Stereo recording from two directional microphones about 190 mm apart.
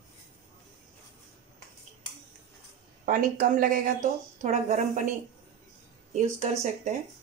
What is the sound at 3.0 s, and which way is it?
Speech, 45° right (ahead or behind).